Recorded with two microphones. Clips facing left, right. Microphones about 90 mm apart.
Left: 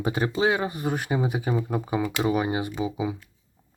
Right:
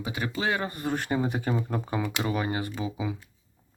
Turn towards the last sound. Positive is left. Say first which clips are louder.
# left 4 dB
turn(degrees=15)  # may be behind; listen again after turning